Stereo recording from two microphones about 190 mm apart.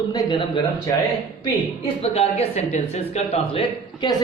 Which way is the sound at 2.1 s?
35° left (ahead or behind).